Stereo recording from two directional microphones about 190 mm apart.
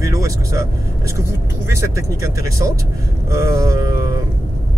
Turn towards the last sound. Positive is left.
turn(degrees=-20)  # may be behind; listen again after turning